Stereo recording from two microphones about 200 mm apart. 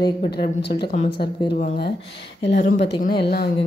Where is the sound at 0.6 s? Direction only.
55° left (ahead or behind).